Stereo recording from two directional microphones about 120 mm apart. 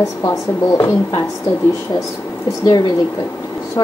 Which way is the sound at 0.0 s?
30° left (ahead or behind).